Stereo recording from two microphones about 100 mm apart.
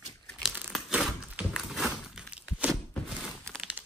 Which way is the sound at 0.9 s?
10° right (ahead or behind).